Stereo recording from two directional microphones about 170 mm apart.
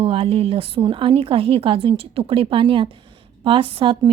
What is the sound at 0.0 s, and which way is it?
A woman's voice, 35° right (ahead or behind).